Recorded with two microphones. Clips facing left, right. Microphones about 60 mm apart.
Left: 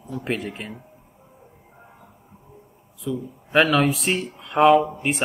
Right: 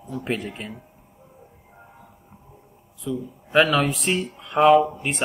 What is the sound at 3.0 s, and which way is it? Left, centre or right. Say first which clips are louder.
A man's voice: left 1 dB; centre.